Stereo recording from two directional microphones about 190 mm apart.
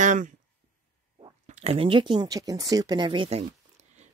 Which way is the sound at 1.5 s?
30° right (ahead or behind).